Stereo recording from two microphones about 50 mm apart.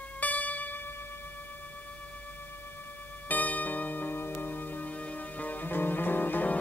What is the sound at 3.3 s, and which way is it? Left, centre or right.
Music, left.